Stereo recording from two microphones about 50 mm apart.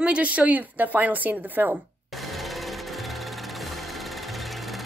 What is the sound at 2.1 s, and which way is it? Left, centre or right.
Jackhammer, centre.